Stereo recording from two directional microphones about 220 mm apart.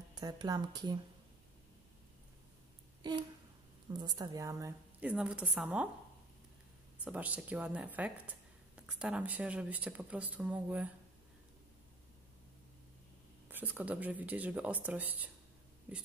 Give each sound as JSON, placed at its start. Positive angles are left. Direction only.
{"t": 0.1, "sound": "speech", "side_deg": -15}
{"t": 3.0, "sound": "speech", "side_deg": -20}
{"t": 7.1, "sound": "speech", "side_deg": -5}
{"t": 13.5, "sound": "speech", "side_deg": -10}